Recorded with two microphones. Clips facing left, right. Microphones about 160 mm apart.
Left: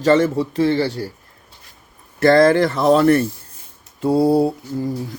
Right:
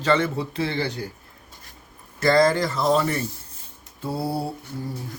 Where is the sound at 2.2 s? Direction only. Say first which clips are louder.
Left 6 dB; 55° left (ahead or behind).